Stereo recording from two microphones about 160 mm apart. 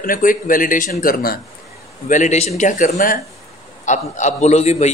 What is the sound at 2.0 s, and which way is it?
Speech, 50° left (ahead or behind).